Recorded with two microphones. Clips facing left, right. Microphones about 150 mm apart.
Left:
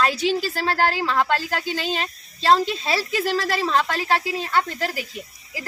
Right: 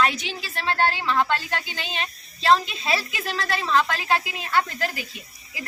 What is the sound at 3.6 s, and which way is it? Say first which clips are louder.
Speech: left 1 dB; 30° left (ahead or behind).